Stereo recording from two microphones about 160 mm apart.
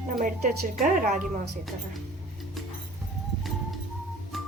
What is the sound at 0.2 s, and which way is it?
A woman's voice, 60° right (ahead or behind).